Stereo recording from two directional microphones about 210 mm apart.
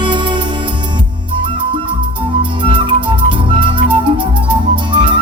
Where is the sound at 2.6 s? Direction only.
25° right (ahead or behind).